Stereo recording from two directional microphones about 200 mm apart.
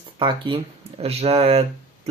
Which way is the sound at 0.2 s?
25° right (ahead or behind).